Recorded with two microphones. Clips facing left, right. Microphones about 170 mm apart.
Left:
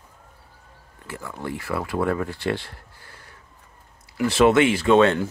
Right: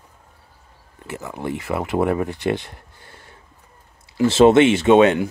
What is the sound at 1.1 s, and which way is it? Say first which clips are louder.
Speech: right 4 dB; 20° right (ahead or behind).